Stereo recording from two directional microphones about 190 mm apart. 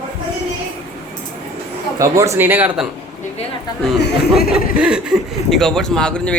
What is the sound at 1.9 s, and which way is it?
Speech, 15° right (ahead or behind).